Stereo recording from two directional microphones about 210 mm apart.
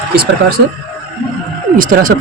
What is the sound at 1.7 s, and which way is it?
Speech, 40° right (ahead or behind).